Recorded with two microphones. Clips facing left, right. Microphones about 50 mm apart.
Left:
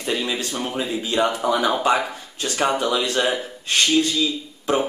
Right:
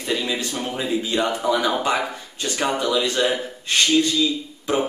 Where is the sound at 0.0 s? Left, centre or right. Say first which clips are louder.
Even; centre.